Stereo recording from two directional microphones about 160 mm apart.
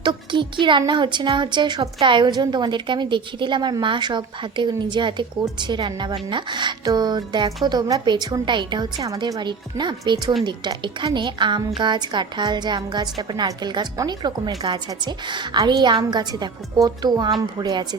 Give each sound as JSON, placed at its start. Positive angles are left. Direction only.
{"t": 0.0, "sound": "a woman's voice", "side_deg": -30}